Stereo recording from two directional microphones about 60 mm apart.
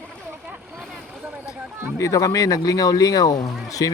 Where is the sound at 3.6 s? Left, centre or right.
Left.